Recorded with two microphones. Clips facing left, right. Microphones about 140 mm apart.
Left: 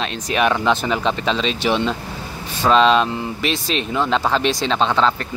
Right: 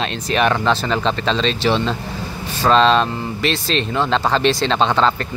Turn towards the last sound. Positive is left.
turn(degrees=0)  # may be behind; listen again after turning